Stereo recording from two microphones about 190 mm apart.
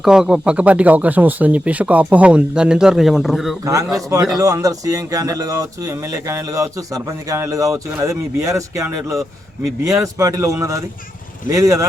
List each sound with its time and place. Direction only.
0.0 s speech: 5° right (ahead or behind)
3.6 s speech: 15° right (ahead or behind)